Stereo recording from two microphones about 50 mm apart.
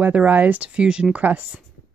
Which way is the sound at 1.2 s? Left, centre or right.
Right.